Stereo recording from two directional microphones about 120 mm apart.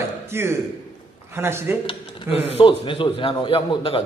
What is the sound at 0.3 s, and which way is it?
A man's voice, 20° right (ahead or behind).